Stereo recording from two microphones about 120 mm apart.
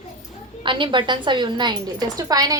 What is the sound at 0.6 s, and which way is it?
A woman's voice, 40° right (ahead or behind).